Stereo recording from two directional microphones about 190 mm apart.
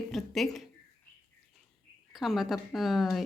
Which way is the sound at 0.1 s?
Centre (ahead or behind).